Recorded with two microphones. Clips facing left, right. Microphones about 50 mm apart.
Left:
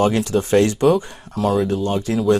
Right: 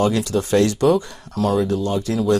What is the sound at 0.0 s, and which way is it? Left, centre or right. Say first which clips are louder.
Speech: left 1 dB; left.